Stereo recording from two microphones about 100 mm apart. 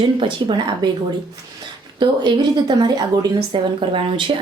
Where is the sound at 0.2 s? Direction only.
55° right (ahead or behind).